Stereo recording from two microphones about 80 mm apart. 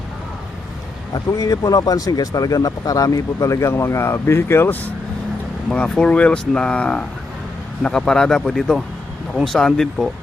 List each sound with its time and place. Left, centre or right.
1.1 s speech: left
5.7 s speech: centre